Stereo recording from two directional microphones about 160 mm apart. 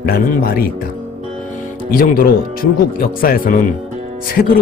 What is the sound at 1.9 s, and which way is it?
Speech, 65° left (ahead or behind).